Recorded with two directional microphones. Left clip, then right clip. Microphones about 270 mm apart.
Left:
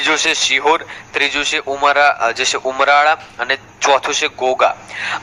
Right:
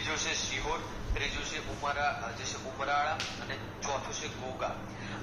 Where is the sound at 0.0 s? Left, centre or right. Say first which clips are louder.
Left 19 dB; left.